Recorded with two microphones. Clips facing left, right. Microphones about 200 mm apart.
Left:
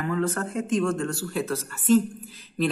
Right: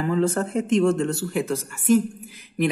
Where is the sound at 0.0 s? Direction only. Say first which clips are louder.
Right 4 dB; 30° right (ahead or behind).